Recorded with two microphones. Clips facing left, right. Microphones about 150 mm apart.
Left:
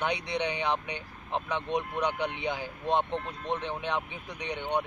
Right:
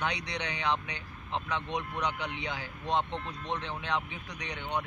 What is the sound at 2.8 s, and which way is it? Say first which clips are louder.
Speech: left 3 dB; 55° left (ahead or behind).